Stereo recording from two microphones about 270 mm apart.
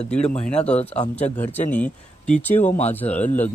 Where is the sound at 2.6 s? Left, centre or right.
Left.